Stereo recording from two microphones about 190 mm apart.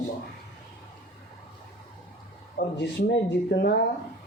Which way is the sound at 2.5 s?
55° left (ahead or behind).